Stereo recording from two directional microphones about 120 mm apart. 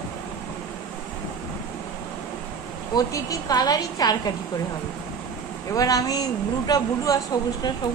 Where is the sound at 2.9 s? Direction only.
30° left (ahead or behind).